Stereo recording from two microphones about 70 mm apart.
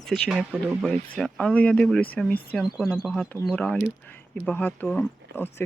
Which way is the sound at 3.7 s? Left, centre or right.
Left.